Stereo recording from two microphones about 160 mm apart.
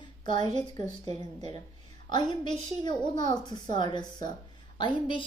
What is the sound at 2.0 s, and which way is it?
A woman's voice, 30° left (ahead or behind).